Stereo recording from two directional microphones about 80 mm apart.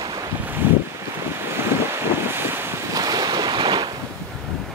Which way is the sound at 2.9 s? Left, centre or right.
Right.